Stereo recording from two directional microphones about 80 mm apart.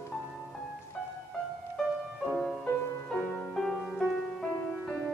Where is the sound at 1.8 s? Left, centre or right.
Centre.